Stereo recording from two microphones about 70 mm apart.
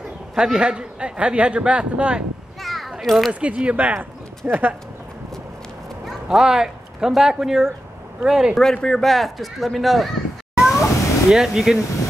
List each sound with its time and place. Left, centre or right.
0.3 s a man's voice: centre
2.6 s children playing: centre
3.3 s speech: centre
6.0 s a man's voice: centre
8.5 s speech: centre
10.6 s cat: centre